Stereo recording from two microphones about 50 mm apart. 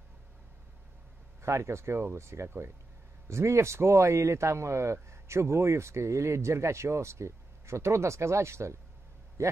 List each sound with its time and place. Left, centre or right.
1.4 s speech: right